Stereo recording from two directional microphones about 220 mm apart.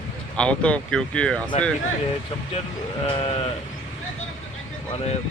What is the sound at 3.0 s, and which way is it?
Speech, 25° left (ahead or behind).